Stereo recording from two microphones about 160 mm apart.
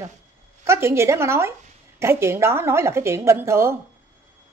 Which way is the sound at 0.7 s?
15° right (ahead or behind).